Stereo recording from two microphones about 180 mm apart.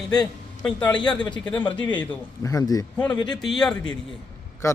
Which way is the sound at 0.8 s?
25° left (ahead or behind).